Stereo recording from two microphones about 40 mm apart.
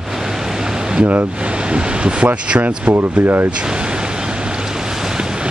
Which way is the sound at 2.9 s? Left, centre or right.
Right.